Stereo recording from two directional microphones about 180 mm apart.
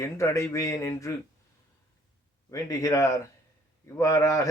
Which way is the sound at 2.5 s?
20° left (ahead or behind).